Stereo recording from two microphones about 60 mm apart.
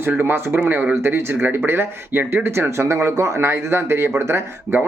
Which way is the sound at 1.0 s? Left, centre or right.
Right.